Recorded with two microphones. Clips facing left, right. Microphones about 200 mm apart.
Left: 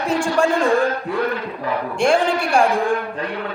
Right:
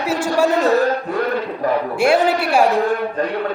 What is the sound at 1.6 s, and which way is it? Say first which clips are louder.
Speech: right 6 dB; 45° right (ahead or behind).